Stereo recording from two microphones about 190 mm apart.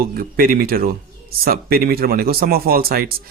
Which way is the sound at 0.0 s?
50° right (ahead or behind).